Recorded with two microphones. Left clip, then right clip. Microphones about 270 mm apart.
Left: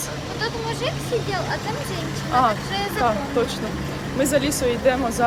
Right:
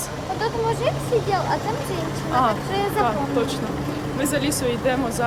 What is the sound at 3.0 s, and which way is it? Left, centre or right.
Speech, centre.